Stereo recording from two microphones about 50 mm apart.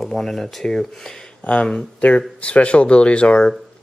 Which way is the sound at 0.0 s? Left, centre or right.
Centre.